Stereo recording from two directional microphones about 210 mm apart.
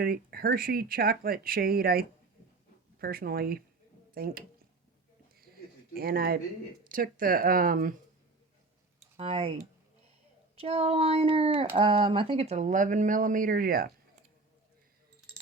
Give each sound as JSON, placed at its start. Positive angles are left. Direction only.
{"t": 0.0, "sound": "speech", "side_deg": -45}
{"t": 5.9, "sound": "speech", "side_deg": -45}
{"t": 9.1, "sound": "speech", "side_deg": -30}
{"t": 10.6, "sound": "speech", "side_deg": -30}